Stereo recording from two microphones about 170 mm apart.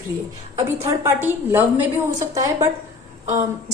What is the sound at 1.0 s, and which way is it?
A woman's voice, 15° right (ahead or behind).